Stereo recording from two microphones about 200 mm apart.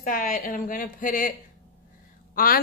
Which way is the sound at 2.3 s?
45° left (ahead or behind).